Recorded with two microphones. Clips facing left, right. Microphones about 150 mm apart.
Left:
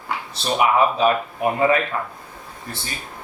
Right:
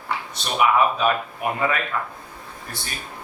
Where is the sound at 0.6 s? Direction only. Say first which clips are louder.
Left 1 dB; 30° left (ahead or behind).